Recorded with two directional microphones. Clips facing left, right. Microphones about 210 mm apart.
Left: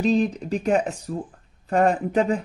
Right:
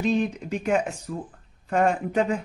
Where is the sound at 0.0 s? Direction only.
35° left (ahead or behind).